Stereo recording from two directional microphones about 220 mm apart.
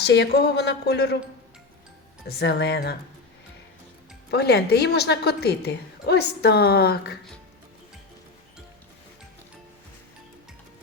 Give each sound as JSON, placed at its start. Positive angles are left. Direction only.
{"t": 0.0, "sound": "a woman's voice", "side_deg": 50}
{"t": 2.2, "sound": "a woman's voice", "side_deg": 50}
{"t": 4.3, "sound": "a woman's voice", "side_deg": 50}